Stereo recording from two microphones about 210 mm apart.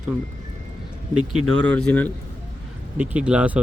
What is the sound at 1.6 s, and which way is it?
Speech, 5° left (ahead or behind).